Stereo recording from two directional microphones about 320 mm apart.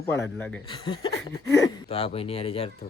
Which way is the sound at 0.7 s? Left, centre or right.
Centre.